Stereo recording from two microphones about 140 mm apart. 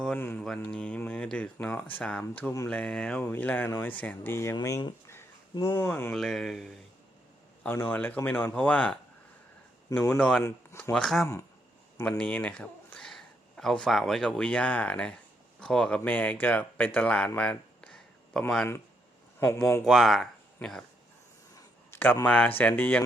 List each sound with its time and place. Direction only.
0.0 s speech: 10° left (ahead or behind)
6.1 s speech: centre (ahead or behind)
7.6 s speech: 15° left (ahead or behind)
10.2 s speech: 5° left (ahead or behind)
10.4 s speech: 20° left (ahead or behind)
10.9 s speech: 5° left (ahead or behind)
19.8 s speech: centre (ahead or behind)
21.5 s speech: 15° left (ahead or behind)